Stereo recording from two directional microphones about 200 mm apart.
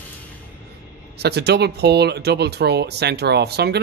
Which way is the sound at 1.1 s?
55° right (ahead or behind).